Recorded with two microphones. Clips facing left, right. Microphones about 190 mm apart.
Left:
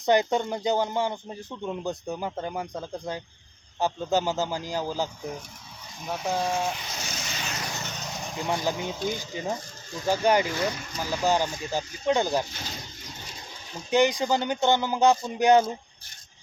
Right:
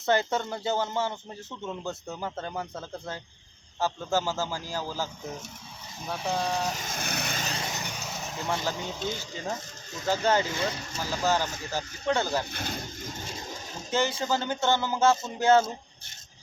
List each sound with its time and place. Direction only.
0.0 s speech: 15° left (ahead or behind)
6.4 s speech: 5° left (ahead or behind)
6.7 s a sound: 45° right (ahead or behind)
7.4 s vehicle: 30° right (ahead or behind)
7.8 s vehicle: 10° right (ahead or behind)
8.4 s speech: 15° left (ahead or behind)
12.5 s a sound: 55° right (ahead or behind)
13.9 s speech: 15° left (ahead or behind)